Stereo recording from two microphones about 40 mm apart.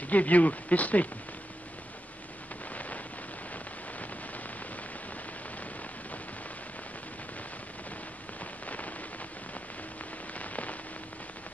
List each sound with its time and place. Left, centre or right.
0.1 s speech: left
2.7 s a sound: left
8.6 s rain: left
10.3 s rain on surface: left